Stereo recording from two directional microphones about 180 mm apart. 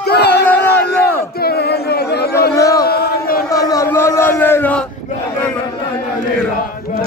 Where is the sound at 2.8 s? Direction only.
60° left (ahead or behind).